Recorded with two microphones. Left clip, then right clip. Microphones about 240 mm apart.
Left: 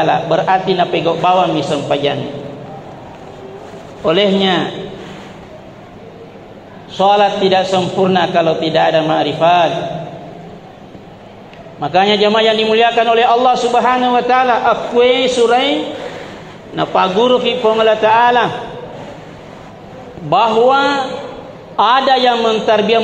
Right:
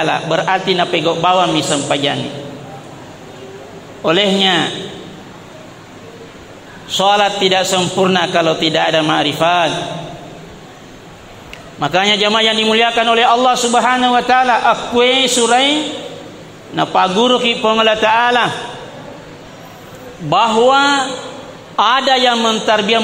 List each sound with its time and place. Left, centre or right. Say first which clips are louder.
0.0 s a man's voice: left 2 dB; right
4.0 s a man's voice: even; right
6.9 s a man's voice: left 1 dB; right
11.8 s a man's voice: left 1 dB; right
16.7 s a man's voice: even; right
20.2 s a man's voice: left 1 dB; right